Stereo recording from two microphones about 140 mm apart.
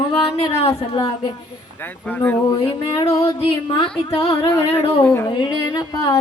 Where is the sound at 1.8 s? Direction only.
10° left (ahead or behind).